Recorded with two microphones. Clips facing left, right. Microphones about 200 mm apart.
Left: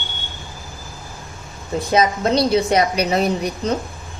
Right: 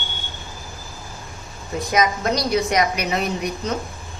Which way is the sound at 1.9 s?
30° left (ahead or behind).